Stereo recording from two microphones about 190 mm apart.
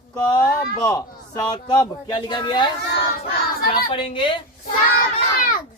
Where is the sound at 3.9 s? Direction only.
25° left (ahead or behind).